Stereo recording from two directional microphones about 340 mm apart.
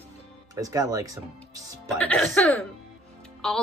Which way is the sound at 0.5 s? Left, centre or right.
Centre.